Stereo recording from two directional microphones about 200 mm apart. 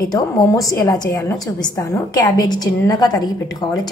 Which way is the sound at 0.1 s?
15° left (ahead or behind).